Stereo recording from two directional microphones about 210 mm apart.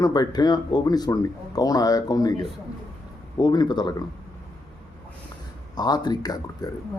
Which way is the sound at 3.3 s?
20° left (ahead or behind).